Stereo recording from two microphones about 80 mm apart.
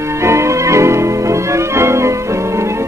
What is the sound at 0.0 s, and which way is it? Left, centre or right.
Music, right.